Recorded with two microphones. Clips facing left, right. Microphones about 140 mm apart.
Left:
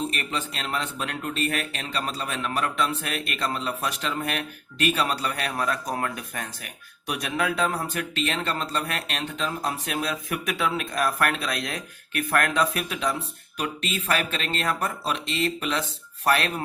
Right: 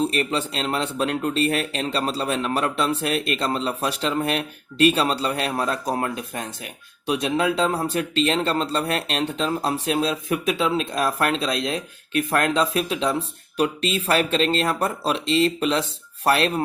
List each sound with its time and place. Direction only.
0.0 s speech: 35° right (ahead or behind)